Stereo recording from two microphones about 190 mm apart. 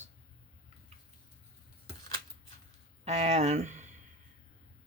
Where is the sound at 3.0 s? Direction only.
35° right (ahead or behind).